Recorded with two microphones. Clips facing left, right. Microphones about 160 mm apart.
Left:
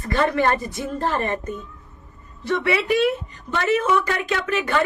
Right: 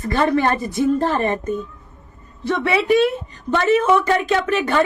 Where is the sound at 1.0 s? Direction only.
30° right (ahead or behind).